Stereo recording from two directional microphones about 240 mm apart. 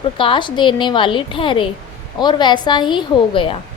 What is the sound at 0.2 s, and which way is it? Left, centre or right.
A woman's voice, left.